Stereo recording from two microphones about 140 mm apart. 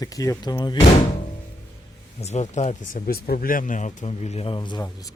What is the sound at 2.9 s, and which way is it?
Speech, 90° left.